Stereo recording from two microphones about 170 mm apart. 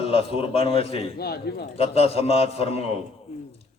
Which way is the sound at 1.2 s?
70° left (ahead or behind).